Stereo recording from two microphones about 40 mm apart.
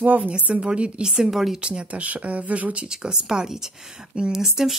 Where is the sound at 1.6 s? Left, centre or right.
Right.